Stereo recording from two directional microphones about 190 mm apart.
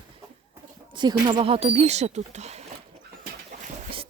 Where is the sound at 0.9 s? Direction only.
25° right (ahead or behind).